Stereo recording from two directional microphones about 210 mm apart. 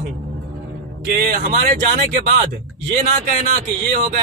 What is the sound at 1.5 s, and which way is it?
Speech, 40° right (ahead or behind).